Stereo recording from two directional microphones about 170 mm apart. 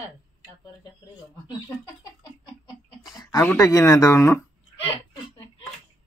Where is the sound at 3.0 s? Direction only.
20° left (ahead or behind).